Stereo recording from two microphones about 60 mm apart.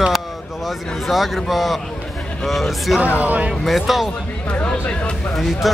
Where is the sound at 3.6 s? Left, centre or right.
Centre.